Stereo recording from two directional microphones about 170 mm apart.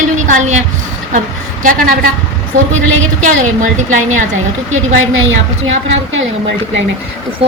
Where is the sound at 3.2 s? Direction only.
45° right (ahead or behind).